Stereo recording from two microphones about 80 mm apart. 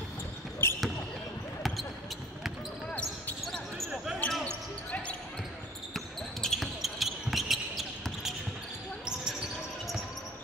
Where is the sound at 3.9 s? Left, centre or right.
Centre.